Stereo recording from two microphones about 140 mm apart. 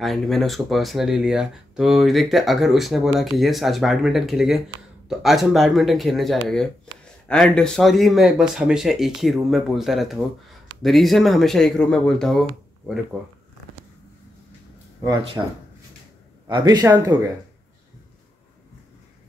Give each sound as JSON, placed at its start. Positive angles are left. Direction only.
{"t": 0.0, "sound": "speech", "side_deg": 0}
{"t": 16.4, "sound": "a man's voice", "side_deg": -30}